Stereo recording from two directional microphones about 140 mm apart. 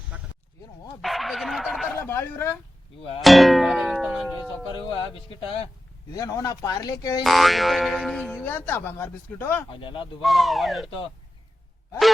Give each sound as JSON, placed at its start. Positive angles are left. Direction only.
{"t": 0.1, "sound": "a sound", "side_deg": -10}
{"t": 1.0, "sound": "speech", "side_deg": 0}
{"t": 2.0, "sound": "speech", "side_deg": 20}
{"t": 3.2, "sound": "speech", "side_deg": 0}
{"t": 4.7, "sound": "speech", "side_deg": 40}
{"t": 6.1, "sound": "speech", "side_deg": 25}
{"t": 7.3, "sound": "speech", "side_deg": 0}
{"t": 9.8, "sound": "speech", "side_deg": 40}
{"t": 10.2, "sound": "speech", "side_deg": 0}